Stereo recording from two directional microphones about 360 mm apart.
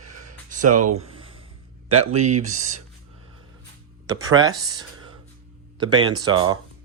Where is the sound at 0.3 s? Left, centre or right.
Right.